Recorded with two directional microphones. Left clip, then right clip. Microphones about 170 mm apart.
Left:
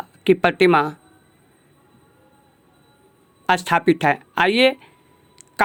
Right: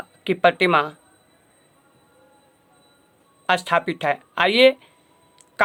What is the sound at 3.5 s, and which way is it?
Speech, 25° left (ahead or behind).